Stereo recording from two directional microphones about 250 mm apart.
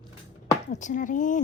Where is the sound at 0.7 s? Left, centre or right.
Left.